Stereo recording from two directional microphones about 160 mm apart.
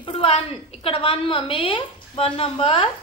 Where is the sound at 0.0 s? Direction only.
35° left (ahead or behind).